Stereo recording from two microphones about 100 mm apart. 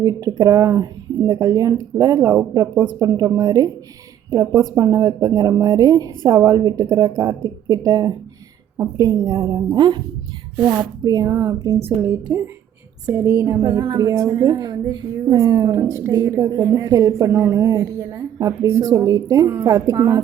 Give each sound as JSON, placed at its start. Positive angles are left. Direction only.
{"t": 0.0, "sound": "a woman's voice", "side_deg": -35}
{"t": 1.3, "sound": "a woman's voice", "side_deg": -40}
{"t": 11.0, "sound": "a woman's voice", "side_deg": -40}